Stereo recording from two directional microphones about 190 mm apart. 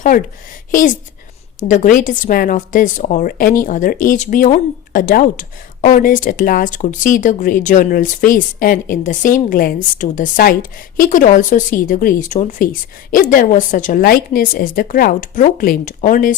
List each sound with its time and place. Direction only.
0.7 s speech: 45° left (ahead or behind)